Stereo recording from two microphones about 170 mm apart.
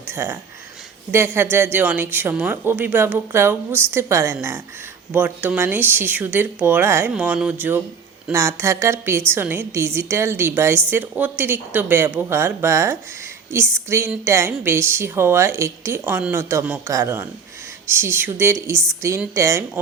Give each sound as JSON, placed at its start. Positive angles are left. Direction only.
{"t": 0.1, "sound": "speech", "side_deg": -15}